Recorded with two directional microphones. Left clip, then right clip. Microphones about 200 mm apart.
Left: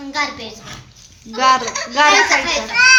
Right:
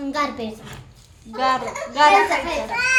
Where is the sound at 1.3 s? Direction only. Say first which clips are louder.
Left 7 dB; 25° left (ahead or behind).